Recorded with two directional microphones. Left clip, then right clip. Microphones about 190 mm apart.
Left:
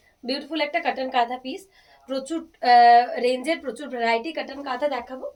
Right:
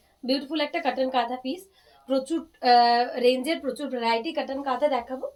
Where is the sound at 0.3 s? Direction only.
15° left (ahead or behind).